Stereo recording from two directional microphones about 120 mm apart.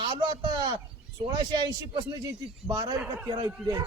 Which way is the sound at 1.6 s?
40° right (ahead or behind).